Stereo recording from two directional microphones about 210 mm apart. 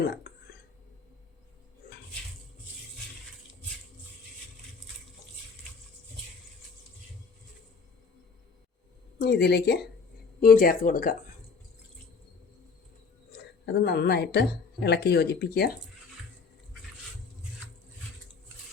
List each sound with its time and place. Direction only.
0.1 s whispering: 50° left (ahead or behind)
9.2 s speech: 50° left (ahead or behind)
13.7 s speech: 50° left (ahead or behind)